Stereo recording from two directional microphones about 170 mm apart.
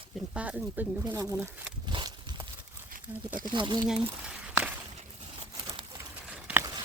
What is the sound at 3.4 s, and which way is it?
Speech, 25° right (ahead or behind).